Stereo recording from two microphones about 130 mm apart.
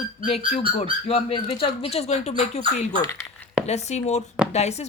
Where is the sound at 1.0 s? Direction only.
45° left (ahead or behind).